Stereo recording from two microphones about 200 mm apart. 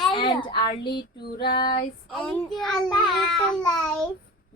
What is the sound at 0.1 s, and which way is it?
Speech, 25° left (ahead or behind).